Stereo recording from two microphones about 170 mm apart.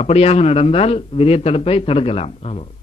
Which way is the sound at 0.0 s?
40° left (ahead or behind).